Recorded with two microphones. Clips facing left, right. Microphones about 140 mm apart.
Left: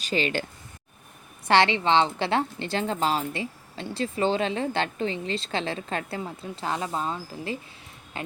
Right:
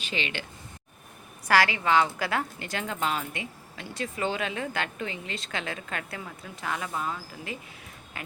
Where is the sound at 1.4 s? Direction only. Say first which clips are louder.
Left 3 dB; 25° left (ahead or behind).